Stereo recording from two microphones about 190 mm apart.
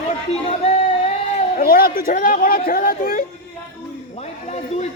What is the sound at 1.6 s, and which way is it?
Speech, 50° left (ahead or behind).